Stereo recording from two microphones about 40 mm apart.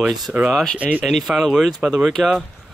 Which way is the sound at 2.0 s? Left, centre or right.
Centre.